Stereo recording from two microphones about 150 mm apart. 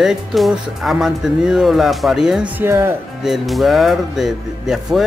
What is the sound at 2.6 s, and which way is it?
Speech, 15° right (ahead or behind).